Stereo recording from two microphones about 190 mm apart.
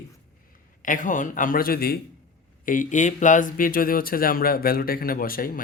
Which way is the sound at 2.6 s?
45° left (ahead or behind).